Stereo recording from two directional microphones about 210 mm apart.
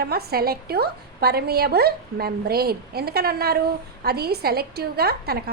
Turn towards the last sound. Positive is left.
turn(degrees=-50)  # may be behind; listen again after turning